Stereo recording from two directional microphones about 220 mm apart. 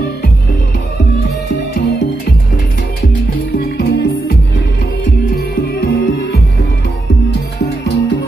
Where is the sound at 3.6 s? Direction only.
45° left (ahead or behind).